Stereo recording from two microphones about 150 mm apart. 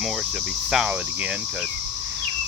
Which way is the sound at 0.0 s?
Centre (ahead or behind).